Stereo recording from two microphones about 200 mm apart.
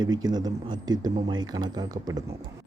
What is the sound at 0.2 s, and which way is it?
Speech, 20° right (ahead or behind).